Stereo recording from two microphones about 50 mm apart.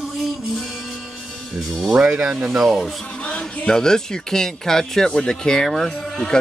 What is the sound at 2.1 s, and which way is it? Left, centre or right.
Speech, centre.